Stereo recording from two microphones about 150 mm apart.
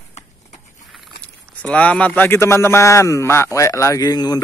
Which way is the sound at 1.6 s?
10° left (ahead or behind).